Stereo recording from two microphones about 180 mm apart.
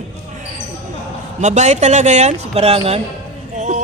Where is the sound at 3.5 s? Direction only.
40° right (ahead or behind).